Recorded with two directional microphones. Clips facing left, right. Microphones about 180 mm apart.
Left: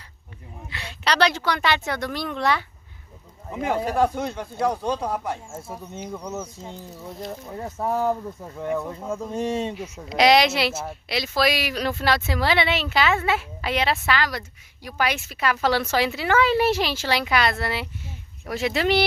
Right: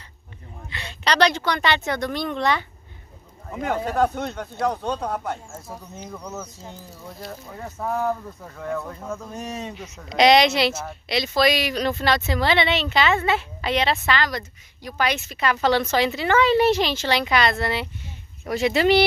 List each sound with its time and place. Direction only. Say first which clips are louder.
0.6 s speech: even; 5° left (ahead or behind)
5.5 s speech: left 2 dB; 25° left (ahead or behind)
5.9 s speech: left 4 dB; 10° left (ahead or behind)
7.2 s speech: left 3 dB; 20° left (ahead or behind)
9.1 s speech: left 7 dB; 30° left (ahead or behind)
9.8 s speech: right 1 dB; 5° left (ahead or behind)